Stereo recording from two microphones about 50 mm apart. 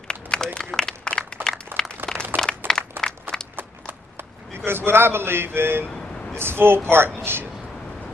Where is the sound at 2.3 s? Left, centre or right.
Right.